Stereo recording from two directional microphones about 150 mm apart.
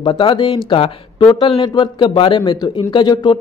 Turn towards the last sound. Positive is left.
turn(degrees=30)  # may be behind; listen again after turning